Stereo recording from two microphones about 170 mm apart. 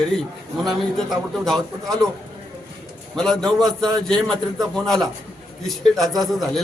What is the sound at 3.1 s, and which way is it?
A man's voice, 5° left (ahead or behind).